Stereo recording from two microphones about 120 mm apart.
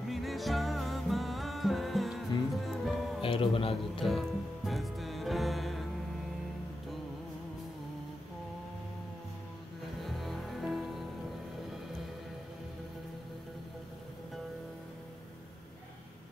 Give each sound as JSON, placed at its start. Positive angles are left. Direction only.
{"t": 0.1, "sound": "music", "side_deg": 0}
{"t": 3.2, "sound": "music", "side_deg": 50}
{"t": 4.0, "sound": "music", "side_deg": 0}
{"t": 10.0, "sound": "music", "side_deg": 0}